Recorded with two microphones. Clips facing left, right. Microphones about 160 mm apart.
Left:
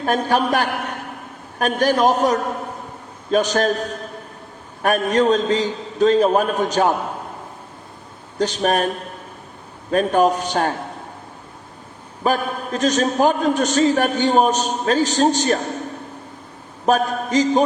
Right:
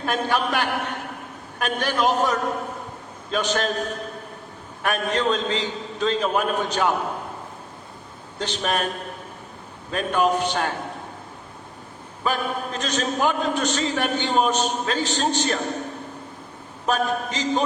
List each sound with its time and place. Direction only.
0.0 s a man's voice: 40° left (ahead or behind)
4.8 s a man's voice: 40° left (ahead or behind)
8.4 s a man's voice: 40° left (ahead or behind)
9.9 s a man's voice: 40° left (ahead or behind)
12.2 s a man's voice: 40° left (ahead or behind)
16.8 s a man's voice: 40° left (ahead or behind)